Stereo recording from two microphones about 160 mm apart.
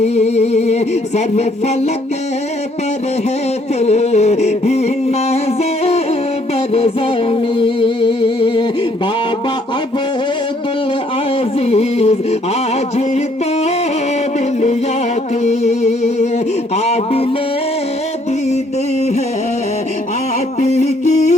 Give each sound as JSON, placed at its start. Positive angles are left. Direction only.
{"t": 0.0, "sound": "music", "side_deg": 40}
{"t": 3.8, "sound": "a sound", "side_deg": 40}
{"t": 5.8, "sound": "music", "side_deg": 40}
{"t": 11.6, "sound": "music", "side_deg": 40}
{"t": 15.4, "sound": "music", "side_deg": 45}
{"t": 16.7, "sound": "a sound", "side_deg": 40}
{"t": 20.6, "sound": "music", "side_deg": 45}